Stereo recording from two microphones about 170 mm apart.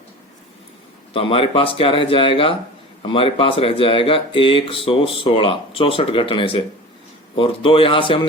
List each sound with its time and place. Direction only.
1.1 s speech: 35° left (ahead or behind)